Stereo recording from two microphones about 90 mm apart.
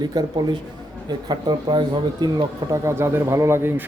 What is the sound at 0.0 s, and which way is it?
Speech, 50° right (ahead or behind).